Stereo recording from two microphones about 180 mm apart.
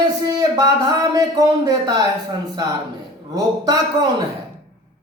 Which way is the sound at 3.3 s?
20° right (ahead or behind).